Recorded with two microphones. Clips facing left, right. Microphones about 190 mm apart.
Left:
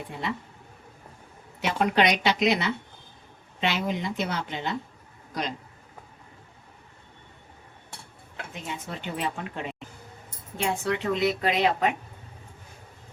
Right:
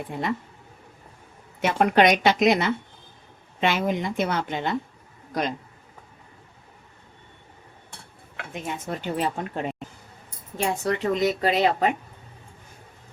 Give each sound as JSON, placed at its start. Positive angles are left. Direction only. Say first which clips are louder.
{"t": 1.6, "sound": "a woman's voice", "louder": "right 4 dB", "side_deg": -50}
{"t": 8.6, "sound": "a woman's voice", "louder": "right 6 dB", "side_deg": -50}